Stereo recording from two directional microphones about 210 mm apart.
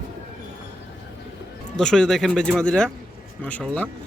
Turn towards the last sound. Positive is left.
turn(degrees=5)  # may be behind; listen again after turning